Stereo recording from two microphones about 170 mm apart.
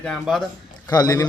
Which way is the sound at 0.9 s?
20° left (ahead or behind).